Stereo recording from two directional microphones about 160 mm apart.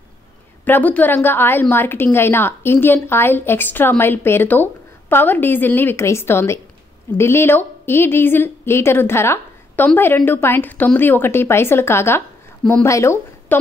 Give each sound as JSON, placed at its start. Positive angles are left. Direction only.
{"t": 0.7, "sound": "a woman's voice", "side_deg": 10}